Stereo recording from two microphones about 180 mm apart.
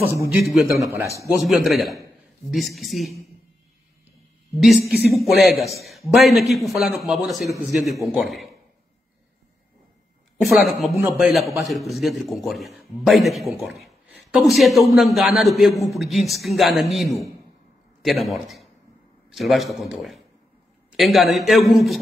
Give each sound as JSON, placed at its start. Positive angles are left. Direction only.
{"t": 0.0, "sound": "a man's voice", "side_deg": -5}
{"t": 0.7, "sound": "a man's voice", "side_deg": -15}
{"t": 1.4, "sound": "a man's voice", "side_deg": 0}
{"t": 4.6, "sound": "a man's voice", "side_deg": 0}
{"t": 10.3, "sound": "a man's voice", "side_deg": 0}